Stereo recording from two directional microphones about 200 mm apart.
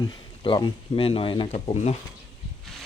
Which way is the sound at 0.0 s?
20° left (ahead or behind).